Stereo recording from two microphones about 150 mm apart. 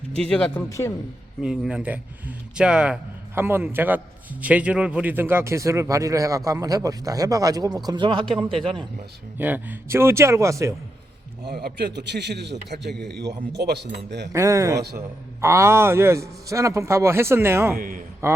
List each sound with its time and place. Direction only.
0.2 s speech: 5° left (ahead or behind)
0.7 s a man's voice: 20° left (ahead or behind)
1.4 s speech: 5° right (ahead or behind); by 8.9 s 35° right (ahead or behind)
9.4 s speech: 10° right (ahead or behind)
11.4 s a man's voice: 90° right
14.3 s speech: 20° right (ahead or behind)
17.7 s a man's voice: 65° right (ahead or behind)
18.2 s speech: 20° right (ahead or behind)